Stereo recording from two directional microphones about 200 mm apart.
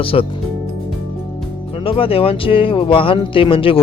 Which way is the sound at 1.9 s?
25° left (ahead or behind).